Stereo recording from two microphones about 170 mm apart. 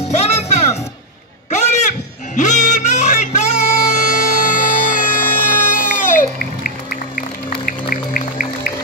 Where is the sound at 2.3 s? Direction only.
45° left (ahead or behind).